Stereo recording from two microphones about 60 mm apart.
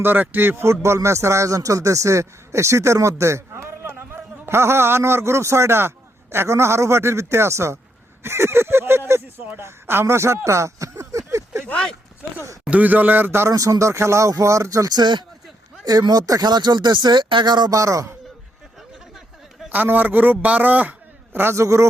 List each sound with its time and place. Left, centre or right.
0.0 s a man's voice: right
8.2 s a sound: right
11.6 s a sound: centre
12.7 s speech: right
13.5 s speech: right
15.9 s speech: right
17.7 s speech: right
19.7 s a man's voice: right
21.5 s speech: right